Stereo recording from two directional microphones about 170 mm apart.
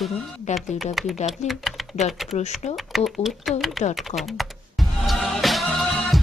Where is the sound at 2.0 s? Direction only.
40° left (ahead or behind).